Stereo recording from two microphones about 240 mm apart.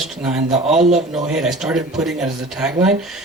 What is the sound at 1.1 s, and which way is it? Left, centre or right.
Speech, centre.